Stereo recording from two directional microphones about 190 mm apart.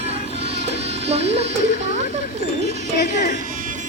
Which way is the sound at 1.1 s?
35° right (ahead or behind).